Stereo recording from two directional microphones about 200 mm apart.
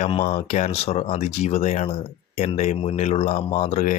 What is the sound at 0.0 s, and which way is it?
Speech, 35° left (ahead or behind).